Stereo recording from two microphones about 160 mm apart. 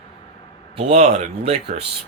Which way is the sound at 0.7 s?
45° right (ahead or behind).